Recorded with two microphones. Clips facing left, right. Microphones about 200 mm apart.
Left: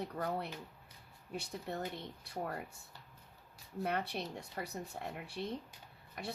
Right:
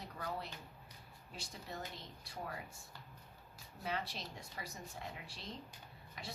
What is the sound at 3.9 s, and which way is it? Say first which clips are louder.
Speech: left 4 dB; 60° left (ahead or behind).